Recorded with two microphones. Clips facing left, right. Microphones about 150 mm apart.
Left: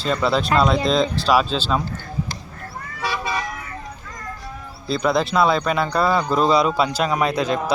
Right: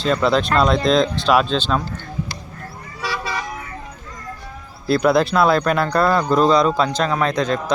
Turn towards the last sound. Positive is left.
turn(degrees=5)  # may be behind; listen again after turning